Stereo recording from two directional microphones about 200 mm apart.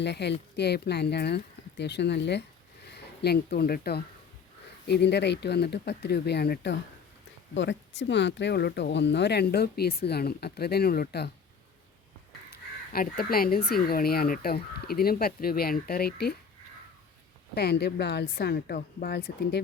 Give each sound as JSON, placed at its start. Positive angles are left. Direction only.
{"t": 0.0, "sound": "speech", "side_deg": 60}
{"t": 12.5, "sound": "speech", "side_deg": 50}
{"t": 17.5, "sound": "speech", "side_deg": 55}